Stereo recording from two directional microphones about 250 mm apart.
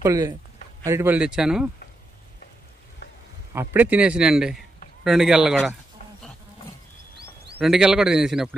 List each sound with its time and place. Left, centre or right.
0.0 s a man's voice: centre
3.5 s a man's voice: centre
7.5 s a man's voice: centre